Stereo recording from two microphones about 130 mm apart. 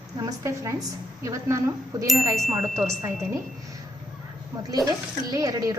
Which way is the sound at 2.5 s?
10° right (ahead or behind).